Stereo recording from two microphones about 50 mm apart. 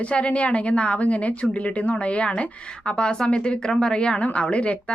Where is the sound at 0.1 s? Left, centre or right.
Left.